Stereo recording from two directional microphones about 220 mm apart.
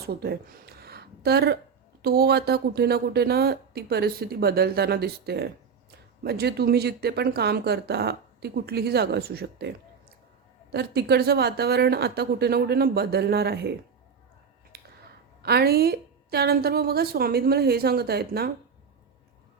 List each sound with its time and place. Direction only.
0.0 s speech: 45° right (ahead or behind)
14.7 s finger snapping: 45° right (ahead or behind)
15.4 s speech: 45° right (ahead or behind)